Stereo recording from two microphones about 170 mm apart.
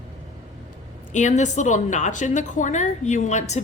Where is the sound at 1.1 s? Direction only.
45° left (ahead or behind).